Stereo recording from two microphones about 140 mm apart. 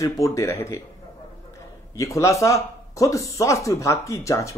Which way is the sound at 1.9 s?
20° left (ahead or behind).